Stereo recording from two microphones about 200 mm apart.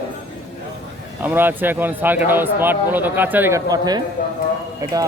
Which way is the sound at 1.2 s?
10° right (ahead or behind).